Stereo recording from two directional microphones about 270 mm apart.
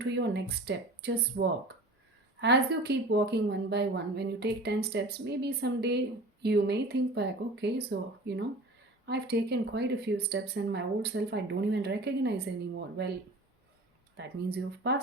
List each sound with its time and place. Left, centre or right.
0.0 s a woman's voice: right
14.2 s a woman's voice: right